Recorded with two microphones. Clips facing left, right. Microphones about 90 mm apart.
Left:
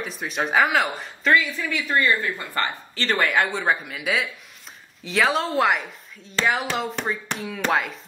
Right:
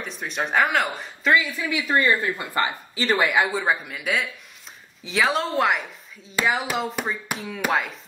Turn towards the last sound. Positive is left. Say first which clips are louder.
# left 1 dB
turn(degrees=0)  # may be behind; listen again after turning